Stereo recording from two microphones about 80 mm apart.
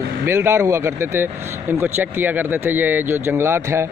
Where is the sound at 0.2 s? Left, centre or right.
Right.